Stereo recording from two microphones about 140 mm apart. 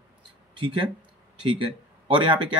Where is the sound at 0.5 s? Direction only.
40° right (ahead or behind).